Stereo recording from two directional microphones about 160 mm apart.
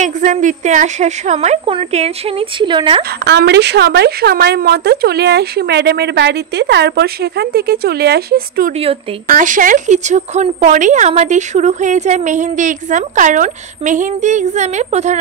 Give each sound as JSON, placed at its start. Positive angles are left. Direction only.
{"t": 0.0, "sound": "a woman's voice", "side_deg": -50}
{"t": 3.0, "sound": "a woman's voice", "side_deg": -90}
{"t": 9.3, "sound": "a woman's voice", "side_deg": -55}